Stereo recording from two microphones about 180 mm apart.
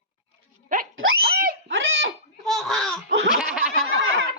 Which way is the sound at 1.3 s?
55° right (ahead or behind).